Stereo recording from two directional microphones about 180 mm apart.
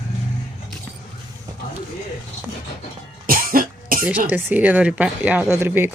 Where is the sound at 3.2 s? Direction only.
50° right (ahead or behind).